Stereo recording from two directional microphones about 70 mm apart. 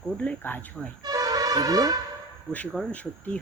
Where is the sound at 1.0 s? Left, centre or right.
Right.